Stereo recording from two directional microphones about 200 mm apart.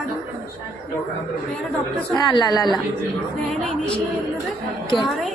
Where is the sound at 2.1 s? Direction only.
20° left (ahead or behind).